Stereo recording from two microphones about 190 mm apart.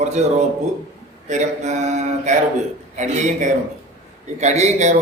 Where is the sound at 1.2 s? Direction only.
40° right (ahead or behind).